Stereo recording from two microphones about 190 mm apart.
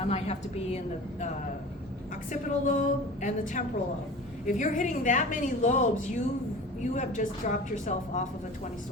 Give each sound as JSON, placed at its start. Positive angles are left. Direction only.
{"t": 0.0, "sound": "a woman's voice", "side_deg": 35}
{"t": 2.3, "sound": "a woman's voice", "side_deg": 40}